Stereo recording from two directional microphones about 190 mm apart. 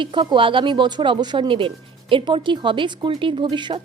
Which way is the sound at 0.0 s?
25° right (ahead or behind).